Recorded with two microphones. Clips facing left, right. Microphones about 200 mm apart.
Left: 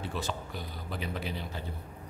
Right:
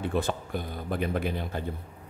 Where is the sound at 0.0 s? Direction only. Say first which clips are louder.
Right 7 dB; 55° right (ahead or behind).